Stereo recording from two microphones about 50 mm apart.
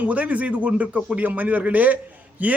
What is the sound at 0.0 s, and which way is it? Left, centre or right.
A man's voice, right.